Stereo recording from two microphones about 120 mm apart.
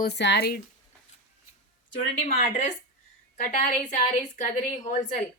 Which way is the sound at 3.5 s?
90° left.